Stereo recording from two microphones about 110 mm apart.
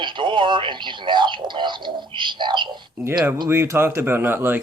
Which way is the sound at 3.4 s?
25° right (ahead or behind).